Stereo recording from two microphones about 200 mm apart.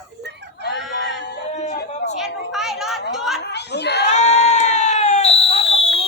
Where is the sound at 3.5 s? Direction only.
55° left (ahead or behind).